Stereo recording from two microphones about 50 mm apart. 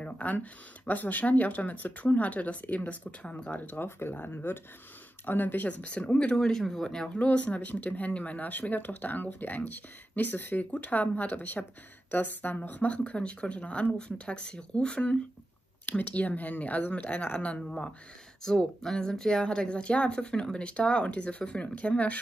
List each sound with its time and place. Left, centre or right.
0.0 s speech: left
3.5 s speech: left
4.3 s speech: left
5.7 s speech: left
6.5 s speech: centre
7.2 s speech: left
12.9 s speech: left
15.8 s speech: left
18.8 s speech: centre; by 22.2 s left